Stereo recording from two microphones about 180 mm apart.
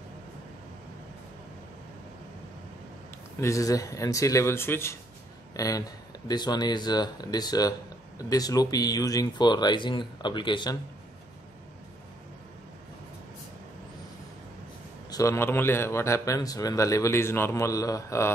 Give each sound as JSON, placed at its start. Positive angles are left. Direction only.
{"t": 3.3, "sound": "a man's voice", "side_deg": 15}
{"t": 15.0, "sound": "a man's voice", "side_deg": 20}